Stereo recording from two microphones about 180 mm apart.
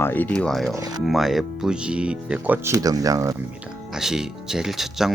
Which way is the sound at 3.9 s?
5° right (ahead or behind).